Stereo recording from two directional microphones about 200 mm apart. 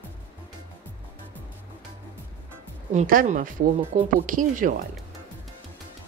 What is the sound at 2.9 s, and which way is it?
Speech, 40° right (ahead or behind).